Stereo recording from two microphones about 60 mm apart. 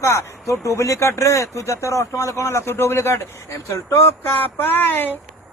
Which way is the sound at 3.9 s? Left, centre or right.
Left.